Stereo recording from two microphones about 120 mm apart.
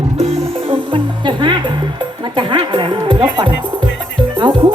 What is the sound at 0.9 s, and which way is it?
Music, 40° right (ahead or behind).